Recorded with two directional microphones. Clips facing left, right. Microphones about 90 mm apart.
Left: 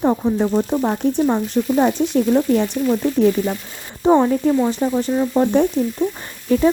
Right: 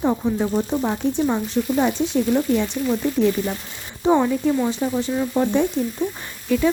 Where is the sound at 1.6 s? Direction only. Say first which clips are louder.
Left 2 dB; 15° left (ahead or behind).